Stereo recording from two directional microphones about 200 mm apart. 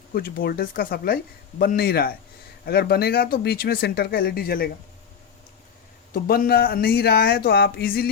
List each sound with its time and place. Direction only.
0.1 s speech: 45° left (ahead or behind)
6.1 s speech: 45° left (ahead or behind)